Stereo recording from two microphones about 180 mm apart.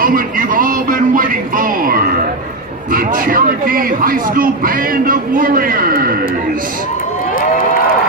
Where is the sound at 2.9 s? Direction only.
50° right (ahead or behind).